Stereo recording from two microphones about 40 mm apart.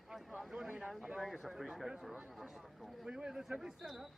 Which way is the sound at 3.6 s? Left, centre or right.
Centre.